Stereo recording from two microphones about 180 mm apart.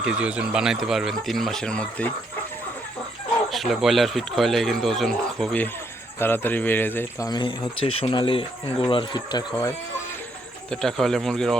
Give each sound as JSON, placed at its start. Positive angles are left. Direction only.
{"t": 0.0, "sound": "speech", "side_deg": -5}
{"t": 3.5, "sound": "speech", "side_deg": 0}
{"t": 10.7, "sound": "speech", "side_deg": 5}